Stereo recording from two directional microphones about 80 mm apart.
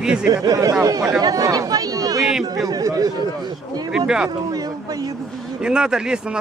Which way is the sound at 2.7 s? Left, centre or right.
Right.